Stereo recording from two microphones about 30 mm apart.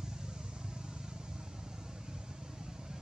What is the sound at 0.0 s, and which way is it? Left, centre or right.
Vehicle, right.